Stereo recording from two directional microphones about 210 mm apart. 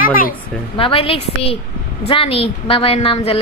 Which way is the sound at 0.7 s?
25° left (ahead or behind).